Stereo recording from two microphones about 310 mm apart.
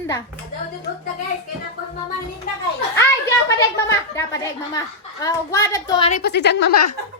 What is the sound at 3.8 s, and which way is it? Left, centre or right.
A woman's voice, centre.